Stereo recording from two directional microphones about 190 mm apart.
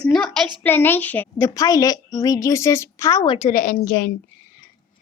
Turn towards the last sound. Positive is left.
turn(degrees=55)  # may be behind; listen again after turning